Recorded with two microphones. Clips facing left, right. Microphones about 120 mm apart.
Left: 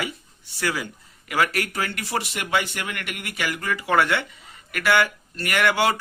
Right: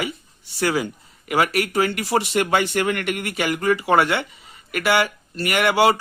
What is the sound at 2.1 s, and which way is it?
Speech, 35° right (ahead or behind).